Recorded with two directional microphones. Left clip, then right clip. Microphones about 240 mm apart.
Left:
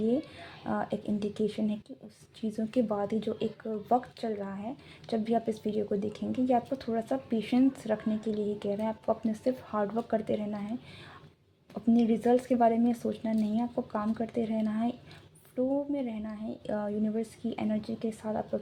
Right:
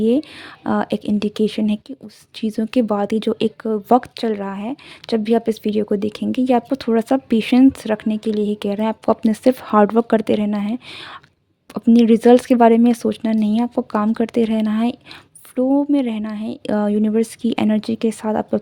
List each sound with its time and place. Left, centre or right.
0.1 s speech: right